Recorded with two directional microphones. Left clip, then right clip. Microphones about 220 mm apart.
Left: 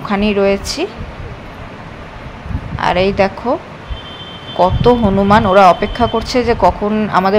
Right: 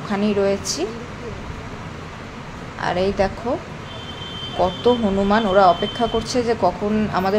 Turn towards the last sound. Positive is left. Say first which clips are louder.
# left 7 dB
turn(degrees=15)  # may be behind; listen again after turning